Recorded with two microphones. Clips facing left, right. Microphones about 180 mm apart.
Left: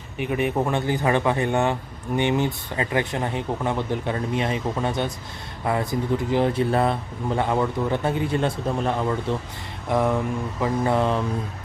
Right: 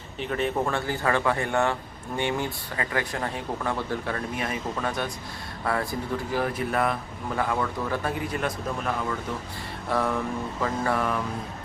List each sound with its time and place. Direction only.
0.2 s speech: 15° left (ahead or behind); by 9.1 s 30° left (ahead or behind)
9.9 s mantra: 15° left (ahead or behind)